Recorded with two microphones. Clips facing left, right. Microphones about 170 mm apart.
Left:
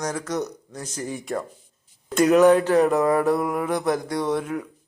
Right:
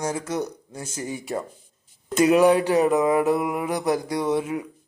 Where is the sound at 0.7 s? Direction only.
30° right (ahead or behind).